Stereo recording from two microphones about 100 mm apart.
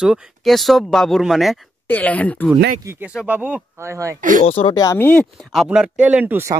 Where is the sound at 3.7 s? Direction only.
30° right (ahead or behind).